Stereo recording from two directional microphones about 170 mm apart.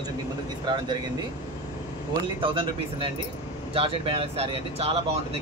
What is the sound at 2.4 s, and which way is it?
Speech, 30° right (ahead or behind).